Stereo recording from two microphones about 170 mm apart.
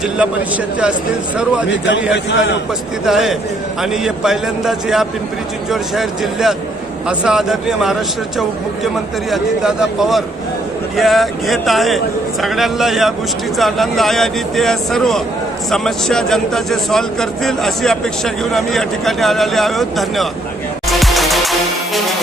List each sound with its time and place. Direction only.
0.2 s speech: 5° right (ahead or behind)
2.1 s a man's voice: 90° left
3.1 s speech: centre (ahead or behind)
9.3 s speech: centre (ahead or behind)
21.0 s music: centre (ahead or behind)